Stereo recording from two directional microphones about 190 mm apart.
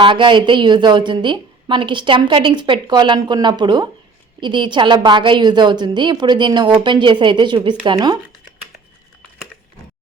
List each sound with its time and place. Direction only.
0.0 s a woman's voice: 25° right (ahead or behind)